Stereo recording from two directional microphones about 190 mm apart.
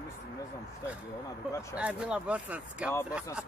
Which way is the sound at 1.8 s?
5° right (ahead or behind).